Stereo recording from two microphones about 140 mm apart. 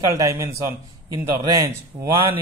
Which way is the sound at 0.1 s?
25° right (ahead or behind).